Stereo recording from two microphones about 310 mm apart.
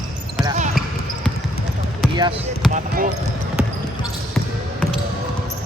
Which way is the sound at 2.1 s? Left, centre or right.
Centre.